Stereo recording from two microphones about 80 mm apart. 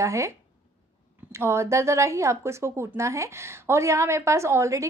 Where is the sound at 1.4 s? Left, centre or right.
Right.